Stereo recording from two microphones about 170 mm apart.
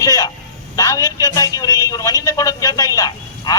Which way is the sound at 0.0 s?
20° left (ahead or behind).